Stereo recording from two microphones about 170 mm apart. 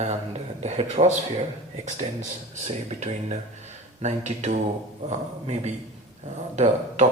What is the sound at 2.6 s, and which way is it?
Speech, 40° right (ahead or behind).